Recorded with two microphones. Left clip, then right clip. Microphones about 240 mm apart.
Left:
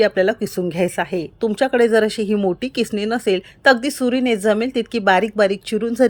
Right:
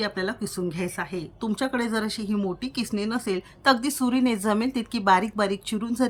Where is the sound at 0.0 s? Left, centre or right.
Centre.